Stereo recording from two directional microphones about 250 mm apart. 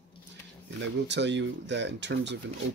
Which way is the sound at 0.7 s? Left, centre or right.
Right.